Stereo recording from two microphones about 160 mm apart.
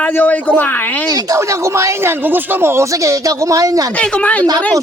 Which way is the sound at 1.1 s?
20° right (ahead or behind).